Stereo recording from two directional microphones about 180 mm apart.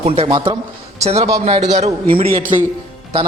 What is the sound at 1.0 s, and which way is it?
A man's voice, 35° right (ahead or behind).